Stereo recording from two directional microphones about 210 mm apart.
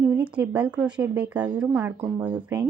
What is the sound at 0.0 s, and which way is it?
Speech, 10° right (ahead or behind).